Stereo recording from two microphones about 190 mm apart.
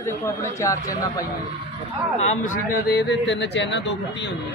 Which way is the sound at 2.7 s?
60° left (ahead or behind).